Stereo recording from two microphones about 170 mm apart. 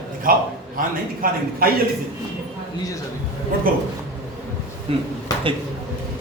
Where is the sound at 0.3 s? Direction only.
55° right (ahead or behind).